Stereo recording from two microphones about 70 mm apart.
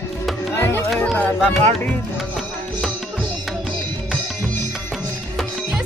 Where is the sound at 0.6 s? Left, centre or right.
Left.